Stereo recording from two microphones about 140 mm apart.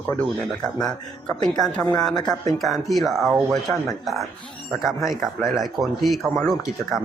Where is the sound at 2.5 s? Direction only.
Centre (ahead or behind).